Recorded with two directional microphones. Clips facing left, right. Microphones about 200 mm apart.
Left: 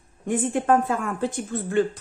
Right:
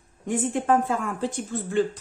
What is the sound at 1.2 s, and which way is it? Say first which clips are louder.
Speech: left 2 dB; 60° left (ahead or behind).